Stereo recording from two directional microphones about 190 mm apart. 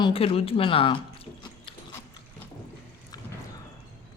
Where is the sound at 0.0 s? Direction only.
30° left (ahead or behind).